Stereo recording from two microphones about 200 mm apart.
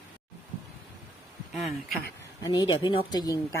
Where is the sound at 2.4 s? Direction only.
20° left (ahead or behind).